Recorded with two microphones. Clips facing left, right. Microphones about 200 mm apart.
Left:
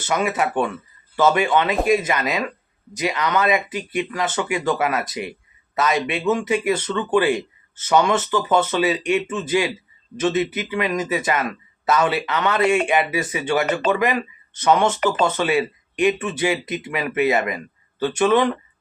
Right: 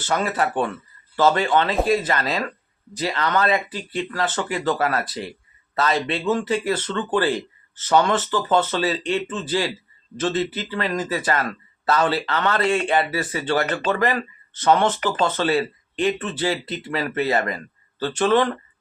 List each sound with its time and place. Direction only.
0.1 s speech: 15° left (ahead or behind)